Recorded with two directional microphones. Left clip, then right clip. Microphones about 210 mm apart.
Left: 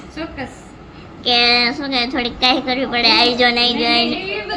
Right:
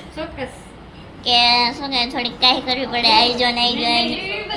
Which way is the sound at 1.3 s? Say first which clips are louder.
Left 1 dB; 15° left (ahead or behind).